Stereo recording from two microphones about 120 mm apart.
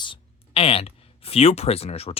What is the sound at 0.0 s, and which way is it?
Speech, 50° left (ahead or behind).